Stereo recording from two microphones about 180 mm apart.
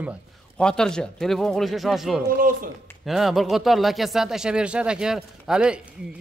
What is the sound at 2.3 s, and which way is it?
Speech, 50° right (ahead or behind).